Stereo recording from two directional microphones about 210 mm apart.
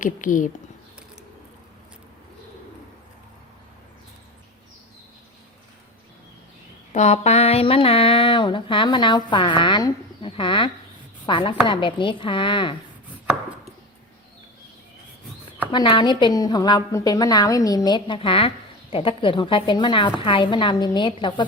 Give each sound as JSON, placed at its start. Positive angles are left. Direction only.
{"t": 0.0, "sound": "speech", "side_deg": 40}
{"t": 6.9, "sound": "a woman's voice", "side_deg": 30}
{"t": 15.7, "sound": "a woman's voice", "side_deg": 20}